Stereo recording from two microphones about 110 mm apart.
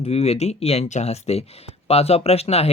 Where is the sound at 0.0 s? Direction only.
70° left (ahead or behind).